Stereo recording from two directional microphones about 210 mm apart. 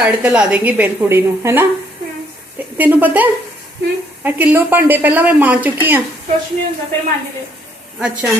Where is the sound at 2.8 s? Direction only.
10° right (ahead or behind).